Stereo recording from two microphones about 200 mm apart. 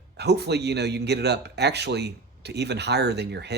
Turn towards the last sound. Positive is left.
turn(degrees=-55)  # may be behind; listen again after turning